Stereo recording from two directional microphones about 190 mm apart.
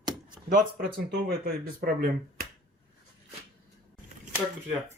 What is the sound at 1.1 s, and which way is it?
Speech, 60° right (ahead or behind).